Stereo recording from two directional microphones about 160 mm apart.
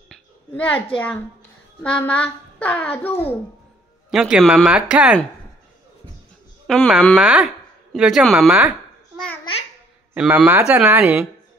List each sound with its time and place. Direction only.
0.1 s a sound: 10° left (ahead or behind)
1.8 s a child's voice: 10° left (ahead or behind)
3.1 s a woman's voice: 40° left (ahead or behind)
4.1 s speech: centre (ahead or behind)
6.7 s speech: centre (ahead or behind)
9.4 s babbling: 35° left (ahead or behind)
10.1 s speech: 5° right (ahead or behind)